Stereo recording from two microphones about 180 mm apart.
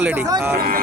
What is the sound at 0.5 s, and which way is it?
Speech, 55° right (ahead or behind).